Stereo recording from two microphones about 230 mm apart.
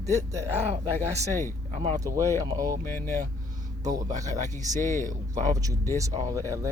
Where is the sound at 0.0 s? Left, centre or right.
Centre.